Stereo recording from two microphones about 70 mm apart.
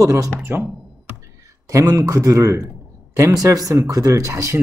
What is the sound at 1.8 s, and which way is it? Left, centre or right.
A man's voice, right.